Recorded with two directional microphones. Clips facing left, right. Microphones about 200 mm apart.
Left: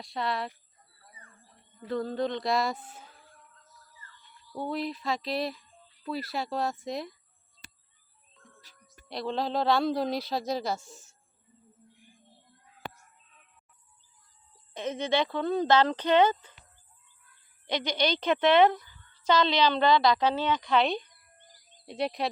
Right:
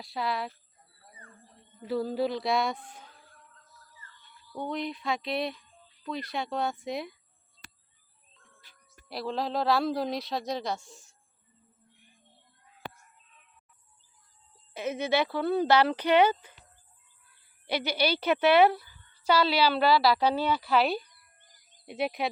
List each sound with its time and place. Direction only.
0.0 s speech: centre (ahead or behind)
1.9 s speech: 5° right (ahead or behind)
4.5 s speech: 5° left (ahead or behind)
8.4 s music: 40° left (ahead or behind)
9.0 s speech: centre (ahead or behind)
14.7 s a woman's voice: 10° right (ahead or behind)
17.7 s a woman's voice: 10° right (ahead or behind)